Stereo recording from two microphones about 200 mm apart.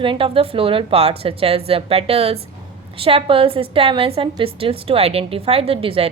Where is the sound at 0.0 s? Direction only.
25° right (ahead or behind).